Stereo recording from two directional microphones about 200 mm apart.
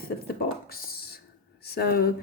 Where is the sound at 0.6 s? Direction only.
50° left (ahead or behind).